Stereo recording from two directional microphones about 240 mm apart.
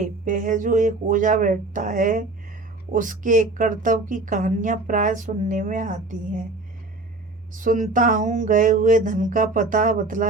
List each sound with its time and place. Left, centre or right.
0.0 s a woman's voice: right
7.5 s a woman's voice: right